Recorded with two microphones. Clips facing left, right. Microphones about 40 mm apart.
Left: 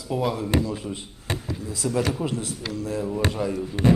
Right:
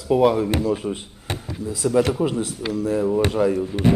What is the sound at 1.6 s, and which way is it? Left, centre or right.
Speech, centre.